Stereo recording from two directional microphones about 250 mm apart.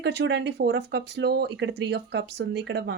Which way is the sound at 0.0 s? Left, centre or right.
Right.